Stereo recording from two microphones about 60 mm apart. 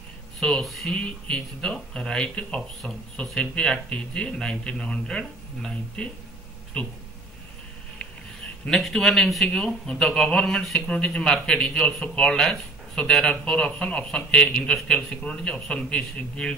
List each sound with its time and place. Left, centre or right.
0.4 s speech: centre
8.6 s a man's voice: centre